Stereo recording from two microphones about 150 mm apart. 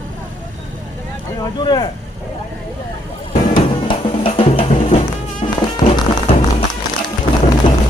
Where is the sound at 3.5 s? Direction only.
35° left (ahead or behind).